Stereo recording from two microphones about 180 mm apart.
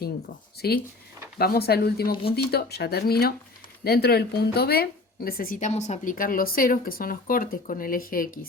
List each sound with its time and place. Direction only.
0.6 s speech: 60° left (ahead or behind)